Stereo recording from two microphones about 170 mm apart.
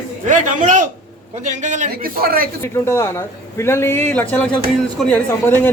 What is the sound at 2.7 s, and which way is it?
Speech, 15° left (ahead or behind).